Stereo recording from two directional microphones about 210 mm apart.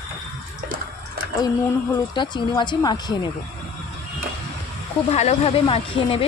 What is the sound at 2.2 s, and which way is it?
Speech, 20° left (ahead or behind).